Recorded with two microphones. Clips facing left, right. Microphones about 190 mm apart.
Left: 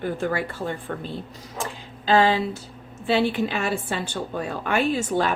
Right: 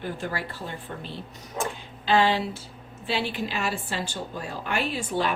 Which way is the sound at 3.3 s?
55° left (ahead or behind).